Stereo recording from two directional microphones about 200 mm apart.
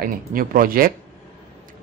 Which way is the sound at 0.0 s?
45° right (ahead or behind).